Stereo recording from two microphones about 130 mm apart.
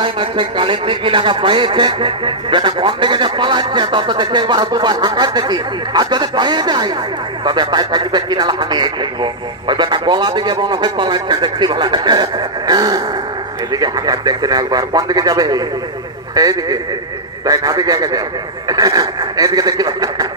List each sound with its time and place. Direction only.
0.0 s a man's voice: 40° right (ahead or behind)